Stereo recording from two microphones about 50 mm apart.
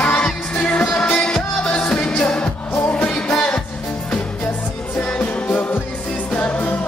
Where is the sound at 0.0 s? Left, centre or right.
Left.